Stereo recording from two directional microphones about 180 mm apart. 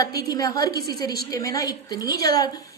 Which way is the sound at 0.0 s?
20° left (ahead or behind).